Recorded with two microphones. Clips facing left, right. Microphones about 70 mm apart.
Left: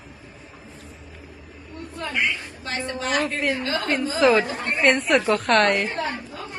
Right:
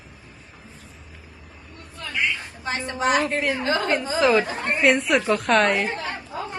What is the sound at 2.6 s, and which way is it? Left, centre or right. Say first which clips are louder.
Speech: right 4 dB; centre.